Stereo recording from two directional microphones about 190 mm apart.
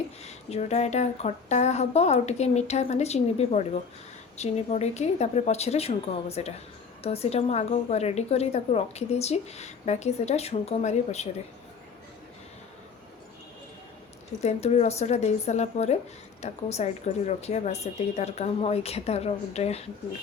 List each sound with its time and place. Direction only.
0.2 s a woman's voice: 35° left (ahead or behind)
14.4 s a woman's voice: 35° left (ahead or behind)